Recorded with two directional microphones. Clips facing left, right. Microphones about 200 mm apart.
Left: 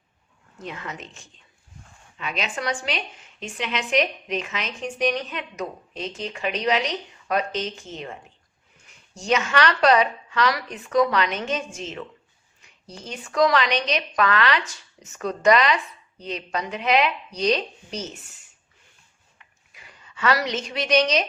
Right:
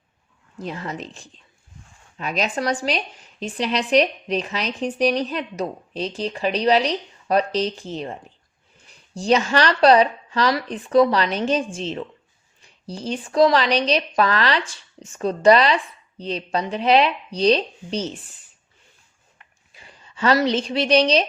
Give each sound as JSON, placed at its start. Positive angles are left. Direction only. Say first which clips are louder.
{"t": 0.6, "sound": "a woman's voice", "louder": "right 5 dB", "side_deg": -35}
{"t": 19.7, "sound": "a woman's voice", "louder": "right 1 dB", "side_deg": -30}